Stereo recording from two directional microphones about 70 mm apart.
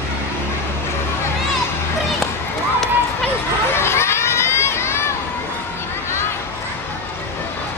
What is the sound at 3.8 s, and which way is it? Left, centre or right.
Crowd, left.